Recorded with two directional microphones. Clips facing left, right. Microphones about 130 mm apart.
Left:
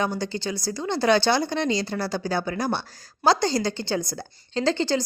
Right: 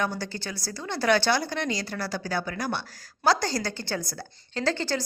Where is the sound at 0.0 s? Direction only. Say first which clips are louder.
Left 4 dB; 20° left (ahead or behind).